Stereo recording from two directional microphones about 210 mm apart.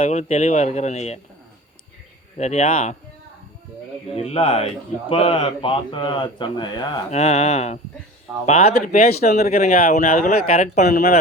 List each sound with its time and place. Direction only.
0.0 s speech: 35° left (ahead or behind)
2.4 s speech: 35° left (ahead or behind)
4.1 s speech: 25° left (ahead or behind)